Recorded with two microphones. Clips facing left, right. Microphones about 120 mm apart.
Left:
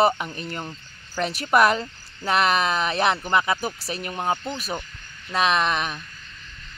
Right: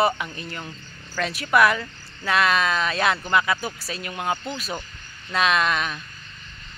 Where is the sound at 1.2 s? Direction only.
20° left (ahead or behind).